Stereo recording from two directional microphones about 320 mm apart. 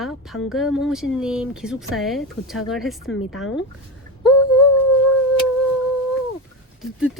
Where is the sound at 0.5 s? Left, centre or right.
Centre.